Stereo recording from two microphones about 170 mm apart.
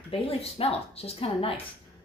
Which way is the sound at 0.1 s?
35° left (ahead or behind).